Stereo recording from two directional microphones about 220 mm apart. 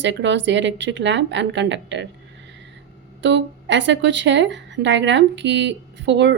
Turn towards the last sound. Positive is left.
turn(degrees=-50)  # may be behind; listen again after turning